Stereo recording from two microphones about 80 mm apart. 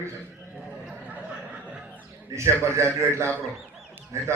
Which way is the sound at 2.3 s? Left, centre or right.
Right.